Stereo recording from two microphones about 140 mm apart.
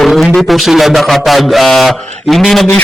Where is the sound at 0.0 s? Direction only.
Centre (ahead or behind).